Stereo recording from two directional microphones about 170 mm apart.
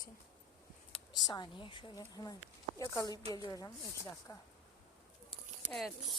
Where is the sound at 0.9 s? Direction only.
25° left (ahead or behind).